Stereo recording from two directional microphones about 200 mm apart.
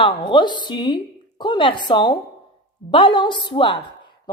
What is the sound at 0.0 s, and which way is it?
A woman's voice, 25° left (ahead or behind).